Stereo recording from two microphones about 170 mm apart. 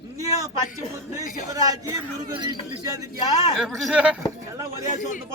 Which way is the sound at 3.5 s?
Centre (ahead or behind).